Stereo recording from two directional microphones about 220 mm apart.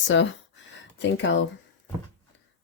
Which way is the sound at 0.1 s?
55° left (ahead or behind).